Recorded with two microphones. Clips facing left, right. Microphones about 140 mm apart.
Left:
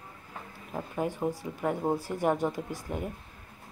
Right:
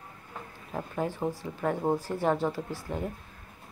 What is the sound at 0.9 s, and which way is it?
Speech, 15° left (ahead or behind).